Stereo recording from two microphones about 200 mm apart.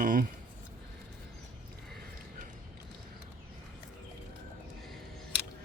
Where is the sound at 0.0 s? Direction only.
45° right (ahead or behind).